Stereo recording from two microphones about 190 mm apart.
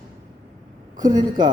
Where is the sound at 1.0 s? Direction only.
20° right (ahead or behind).